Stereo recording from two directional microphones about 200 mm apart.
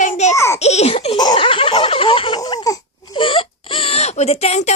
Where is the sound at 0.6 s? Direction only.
35° left (ahead or behind).